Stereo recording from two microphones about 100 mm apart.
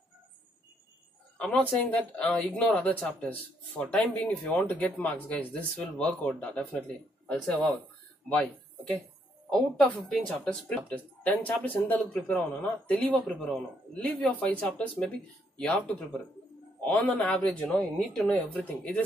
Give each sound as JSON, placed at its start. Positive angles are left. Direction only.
{"t": 1.4, "sound": "speech", "side_deg": 15}